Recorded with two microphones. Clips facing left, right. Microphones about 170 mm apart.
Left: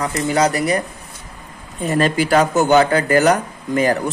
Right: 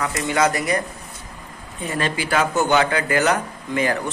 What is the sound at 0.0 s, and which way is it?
Speech, 35° left (ahead or behind).